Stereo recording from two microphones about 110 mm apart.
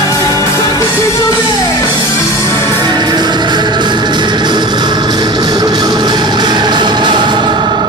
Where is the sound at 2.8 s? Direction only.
40° right (ahead or behind).